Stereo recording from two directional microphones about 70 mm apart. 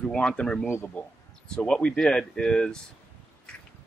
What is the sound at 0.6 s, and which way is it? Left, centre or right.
Speech, left.